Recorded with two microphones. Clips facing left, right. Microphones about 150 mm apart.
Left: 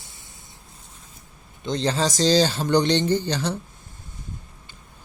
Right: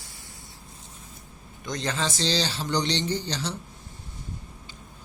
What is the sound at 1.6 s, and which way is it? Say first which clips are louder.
Speech: left 6 dB; 30° left (ahead or behind).